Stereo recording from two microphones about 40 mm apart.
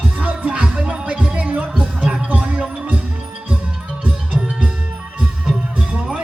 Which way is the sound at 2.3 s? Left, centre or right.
Right.